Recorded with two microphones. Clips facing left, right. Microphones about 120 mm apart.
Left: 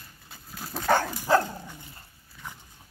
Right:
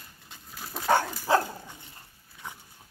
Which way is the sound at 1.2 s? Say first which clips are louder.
Left 2 dB; 15° right (ahead or behind).